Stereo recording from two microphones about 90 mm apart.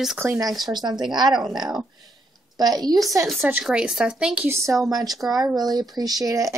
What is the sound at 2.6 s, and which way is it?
Speech, 45° right (ahead or behind).